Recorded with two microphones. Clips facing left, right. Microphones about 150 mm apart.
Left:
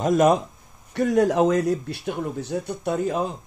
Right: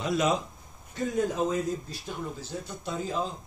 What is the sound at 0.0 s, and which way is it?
Speech, 50° left (ahead or behind).